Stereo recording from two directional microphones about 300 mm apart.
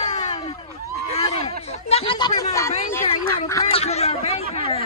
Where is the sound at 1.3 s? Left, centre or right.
Left.